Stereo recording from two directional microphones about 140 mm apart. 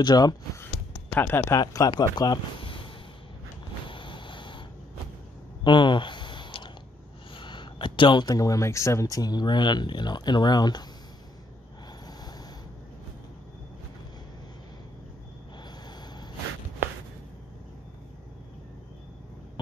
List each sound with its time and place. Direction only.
0.0 s speech: 30° left (ahead or behind)
1.1 s speech: 15° left (ahead or behind)
1.6 s speech: 25° left (ahead or behind)
3.9 s vehicle: 35° left (ahead or behind)
5.6 s a sound: 35° left (ahead or behind)
7.3 s speech: 35° left (ahead or behind)